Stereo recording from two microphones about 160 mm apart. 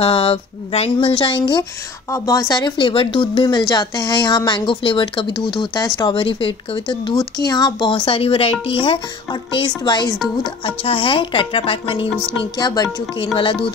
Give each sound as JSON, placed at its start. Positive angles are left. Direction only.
{"t": 0.0, "sound": "speech", "side_deg": 35}
{"t": 12.5, "sound": "speech", "side_deg": 25}